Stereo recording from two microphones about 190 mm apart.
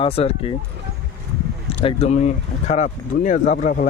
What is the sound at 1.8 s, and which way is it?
Speech, 30° left (ahead or behind).